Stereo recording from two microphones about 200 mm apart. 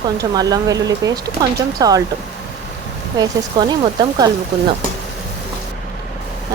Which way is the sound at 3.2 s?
20° right (ahead or behind).